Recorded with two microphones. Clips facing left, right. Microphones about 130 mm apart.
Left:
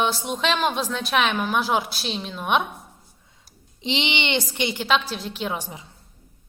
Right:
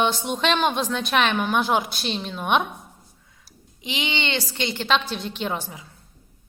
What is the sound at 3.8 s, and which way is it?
A woman's voice, 30° left (ahead or behind).